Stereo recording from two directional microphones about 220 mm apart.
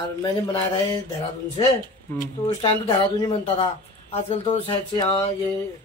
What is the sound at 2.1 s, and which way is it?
Speech, 10° left (ahead or behind).